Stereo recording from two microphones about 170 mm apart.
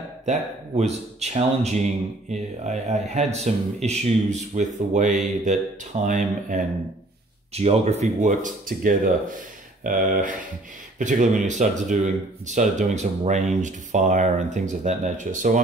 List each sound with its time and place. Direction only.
0.2 s speech: 45° right (ahead or behind)